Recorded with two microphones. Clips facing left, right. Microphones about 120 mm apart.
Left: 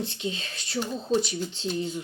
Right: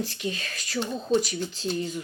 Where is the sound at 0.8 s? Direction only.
5° left (ahead or behind).